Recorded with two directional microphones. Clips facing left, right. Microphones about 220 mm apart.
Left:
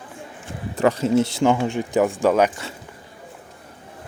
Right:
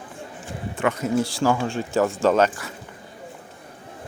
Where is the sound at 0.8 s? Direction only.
30° left (ahead or behind); by 2.5 s 15° left (ahead or behind).